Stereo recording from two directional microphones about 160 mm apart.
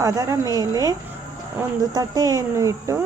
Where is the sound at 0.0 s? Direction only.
20° right (ahead or behind).